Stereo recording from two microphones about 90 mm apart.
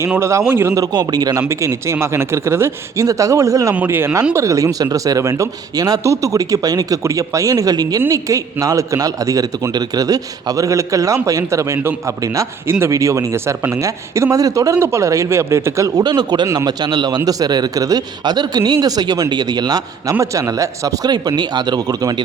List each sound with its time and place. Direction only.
0.2 s a man's voice: 30° right (ahead or behind)
0.8 s speech: 50° right (ahead or behind)
1.4 s a man's voice: 35° right (ahead or behind)
16.0 s speech: 50° right (ahead or behind)
20.3 s speech: 35° right (ahead or behind)